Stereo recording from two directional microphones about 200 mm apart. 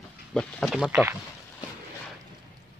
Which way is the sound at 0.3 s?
5° left (ahead or behind).